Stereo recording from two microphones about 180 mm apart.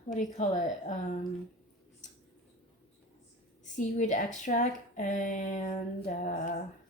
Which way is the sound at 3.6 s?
45° left (ahead or behind).